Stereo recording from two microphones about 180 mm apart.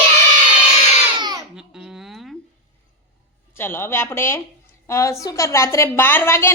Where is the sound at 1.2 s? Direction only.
25° right (ahead or behind).